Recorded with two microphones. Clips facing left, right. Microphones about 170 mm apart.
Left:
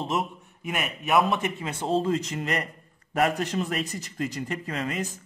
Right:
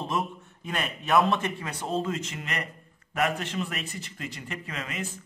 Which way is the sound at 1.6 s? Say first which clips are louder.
Left 4 dB; 25° left (ahead or behind).